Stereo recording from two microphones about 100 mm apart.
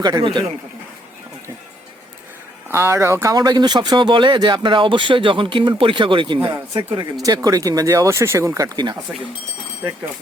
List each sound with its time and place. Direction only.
0.0 s a man's voice: 50° right (ahead or behind)
2.6 s speech: 25° right (ahead or behind)
3.3 s speech: 45° right (ahead or behind)
7.2 s speech: 35° right (ahead or behind)